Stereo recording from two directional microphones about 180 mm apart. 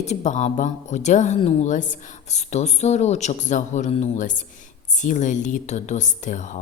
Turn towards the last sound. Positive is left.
turn(degrees=45)  # may be behind; listen again after turning